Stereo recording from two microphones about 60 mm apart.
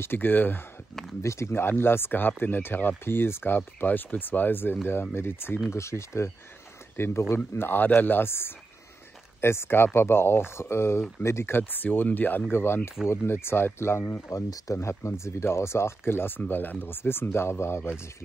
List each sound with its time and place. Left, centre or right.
0.0 s speech: left
1.2 s speech: left
5.7 s speech: left
7.3 s speech: left
12.5 s speech: left
14.3 s speech: left